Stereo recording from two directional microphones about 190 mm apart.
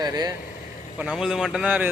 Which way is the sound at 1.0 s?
5° right (ahead or behind).